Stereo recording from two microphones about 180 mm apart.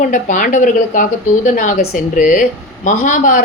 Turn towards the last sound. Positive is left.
turn(degrees=50)  # may be behind; listen again after turning